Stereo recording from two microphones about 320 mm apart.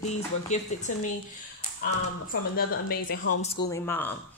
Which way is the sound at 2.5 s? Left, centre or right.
Left.